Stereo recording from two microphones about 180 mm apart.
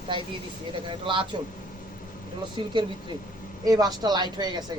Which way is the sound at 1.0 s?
25° right (ahead or behind).